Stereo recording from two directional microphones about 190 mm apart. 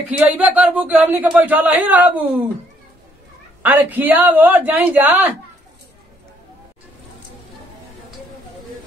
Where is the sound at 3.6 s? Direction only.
10° right (ahead or behind).